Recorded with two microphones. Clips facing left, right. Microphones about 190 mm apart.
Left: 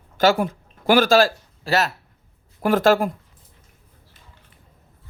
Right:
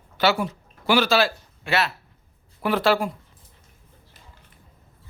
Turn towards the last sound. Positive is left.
turn(degrees=50)  # may be behind; listen again after turning